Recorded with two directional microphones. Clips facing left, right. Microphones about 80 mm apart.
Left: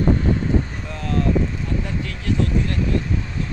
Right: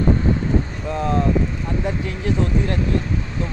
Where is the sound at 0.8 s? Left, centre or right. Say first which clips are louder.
Right 4 dB; right.